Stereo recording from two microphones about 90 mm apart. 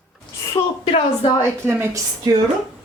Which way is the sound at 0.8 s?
90° left.